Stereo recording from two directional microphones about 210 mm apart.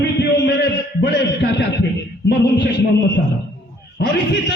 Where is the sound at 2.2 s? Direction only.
55° left (ahead or behind).